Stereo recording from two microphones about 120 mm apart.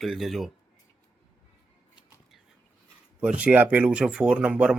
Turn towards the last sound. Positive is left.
turn(degrees=-10)  # may be behind; listen again after turning